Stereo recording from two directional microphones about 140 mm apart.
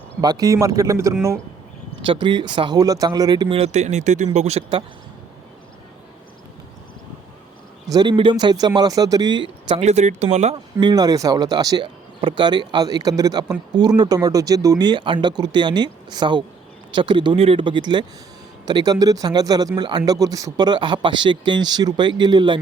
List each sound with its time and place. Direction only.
0.2 s speech: 25° right (ahead or behind)
2.0 s speech: 35° right (ahead or behind)
7.9 s speech: 30° right (ahead or behind)
9.8 s speech: 55° right (ahead or behind)
10.5 s speech: 35° right (ahead or behind)